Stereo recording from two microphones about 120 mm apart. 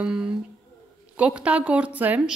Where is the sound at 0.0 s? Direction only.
5° right (ahead or behind).